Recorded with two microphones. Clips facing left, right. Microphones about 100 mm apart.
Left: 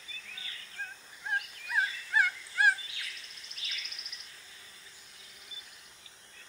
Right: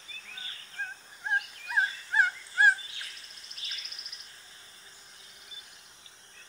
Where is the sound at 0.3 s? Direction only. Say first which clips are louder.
Right 3 dB; 35° right (ahead or behind).